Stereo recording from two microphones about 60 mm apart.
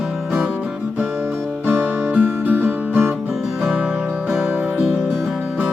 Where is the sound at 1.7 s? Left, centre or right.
Right.